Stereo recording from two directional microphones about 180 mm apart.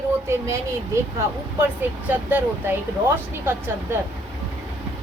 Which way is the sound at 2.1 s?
10° right (ahead or behind).